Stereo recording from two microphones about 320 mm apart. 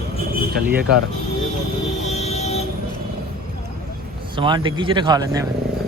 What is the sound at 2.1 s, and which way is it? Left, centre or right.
Vehicle, centre.